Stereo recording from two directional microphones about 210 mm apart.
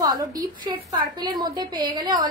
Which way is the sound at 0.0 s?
15° right (ahead or behind).